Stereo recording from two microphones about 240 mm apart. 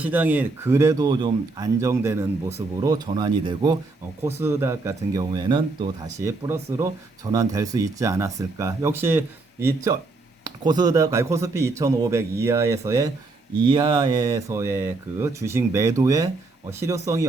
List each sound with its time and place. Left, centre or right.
0.0 s speech: centre